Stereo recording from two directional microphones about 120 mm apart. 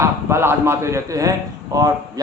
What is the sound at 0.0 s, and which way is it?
A man's voice, 20° right (ahead or behind).